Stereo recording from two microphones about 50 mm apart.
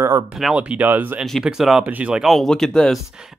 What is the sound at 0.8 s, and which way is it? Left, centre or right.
Speech, right.